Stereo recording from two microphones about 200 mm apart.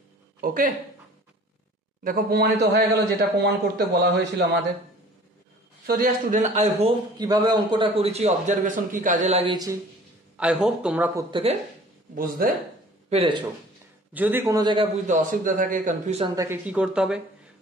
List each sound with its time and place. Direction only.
0.4 s speech: 45° right (ahead or behind)
2.0 s speech: 45° right (ahead or behind)
5.9 s a man's voice: 40° right (ahead or behind)
7.2 s a man's voice: 20° right (ahead or behind)
10.3 s speech: 5° right (ahead or behind)
11.1 s a man's voice: 25° right (ahead or behind)
12.2 s speech: 45° right (ahead or behind)
13.1 s a man's voice: 25° right (ahead or behind)
14.1 s a man's voice: 10° right (ahead or behind)
15.0 s a man's voice: 45° right (ahead or behind)
16.3 s speech: 10° right (ahead or behind)